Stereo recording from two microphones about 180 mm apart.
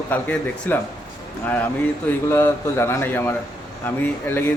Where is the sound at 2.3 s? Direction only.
15° left (ahead or behind).